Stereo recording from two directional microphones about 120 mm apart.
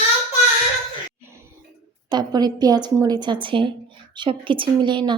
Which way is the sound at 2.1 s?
35° right (ahead or behind).